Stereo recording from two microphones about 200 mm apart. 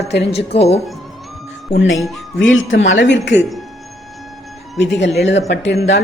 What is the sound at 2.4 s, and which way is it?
Speech, 70° left (ahead or behind).